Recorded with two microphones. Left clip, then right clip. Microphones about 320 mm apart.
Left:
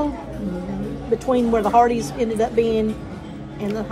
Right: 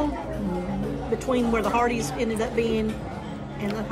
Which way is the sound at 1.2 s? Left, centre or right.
Centre.